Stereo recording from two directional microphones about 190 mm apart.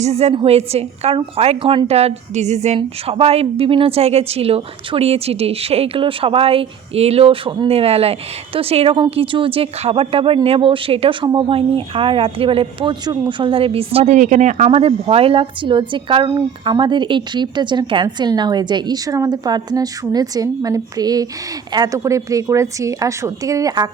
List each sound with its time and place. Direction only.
0.0 s a woman's voice: 35° right (ahead or behind)